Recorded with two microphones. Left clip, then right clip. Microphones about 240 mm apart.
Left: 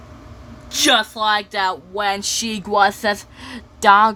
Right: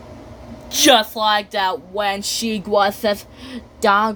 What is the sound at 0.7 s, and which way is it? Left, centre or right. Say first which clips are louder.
Speech: right 3 dB; centre.